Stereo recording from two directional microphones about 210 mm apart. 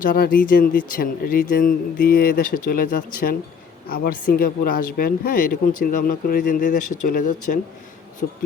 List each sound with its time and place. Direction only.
0.0 s speech: 40° left (ahead or behind)